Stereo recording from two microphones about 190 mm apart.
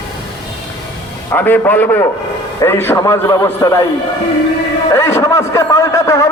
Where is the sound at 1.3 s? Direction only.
10° left (ahead or behind).